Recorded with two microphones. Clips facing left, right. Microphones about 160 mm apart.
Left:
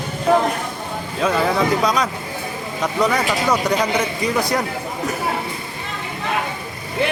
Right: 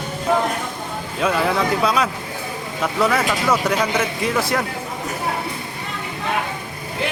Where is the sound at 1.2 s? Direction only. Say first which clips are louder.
Left 1 dB; centre (ahead or behind).